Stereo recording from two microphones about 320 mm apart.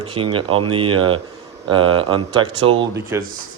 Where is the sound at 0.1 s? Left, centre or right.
Centre.